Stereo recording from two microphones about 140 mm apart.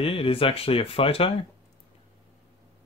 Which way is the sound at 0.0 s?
40° left (ahead or behind).